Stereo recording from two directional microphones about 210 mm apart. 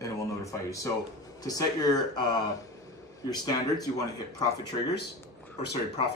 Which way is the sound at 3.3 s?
20° left (ahead or behind).